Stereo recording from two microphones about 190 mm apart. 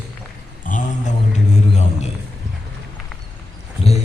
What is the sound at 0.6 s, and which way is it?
Dog, 40° left (ahead or behind).